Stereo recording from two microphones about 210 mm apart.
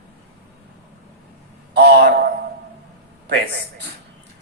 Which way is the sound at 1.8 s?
50° right (ahead or behind).